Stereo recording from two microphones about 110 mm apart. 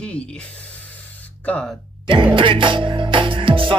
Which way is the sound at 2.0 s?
45° right (ahead or behind).